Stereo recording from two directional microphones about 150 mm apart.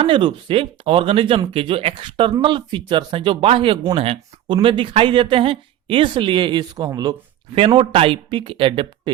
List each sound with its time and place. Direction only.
0.0 s speech: 35° right (ahead or behind)
7.5 s speech: 35° right (ahead or behind)